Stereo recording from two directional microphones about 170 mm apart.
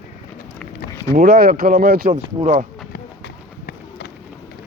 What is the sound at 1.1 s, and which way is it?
Speech, 60° right (ahead or behind).